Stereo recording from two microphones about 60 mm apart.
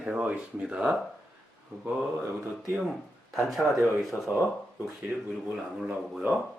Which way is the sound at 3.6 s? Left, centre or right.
Centre.